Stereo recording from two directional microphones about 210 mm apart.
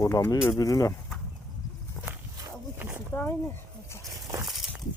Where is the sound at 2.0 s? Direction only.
10° right (ahead or behind).